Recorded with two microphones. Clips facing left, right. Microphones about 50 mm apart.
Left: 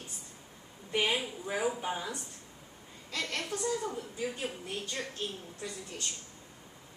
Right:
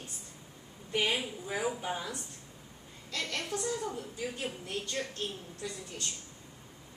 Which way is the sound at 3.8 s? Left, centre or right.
Left.